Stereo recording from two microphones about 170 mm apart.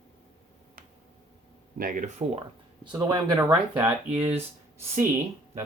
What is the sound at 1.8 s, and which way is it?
Speech, 55° right (ahead or behind).